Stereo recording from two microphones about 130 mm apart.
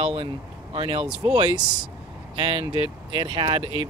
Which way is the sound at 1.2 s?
30° right (ahead or behind).